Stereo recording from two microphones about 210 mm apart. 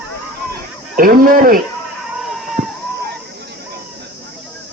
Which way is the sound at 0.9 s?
40° right (ahead or behind).